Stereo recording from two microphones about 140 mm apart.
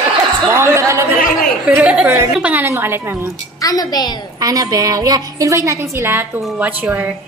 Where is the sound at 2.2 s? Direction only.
10° right (ahead or behind).